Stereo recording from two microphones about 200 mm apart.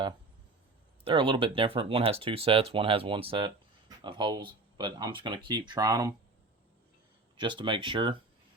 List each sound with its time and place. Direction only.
1.0 s speech: 25° right (ahead or behind)
7.3 s speech: 25° right (ahead or behind)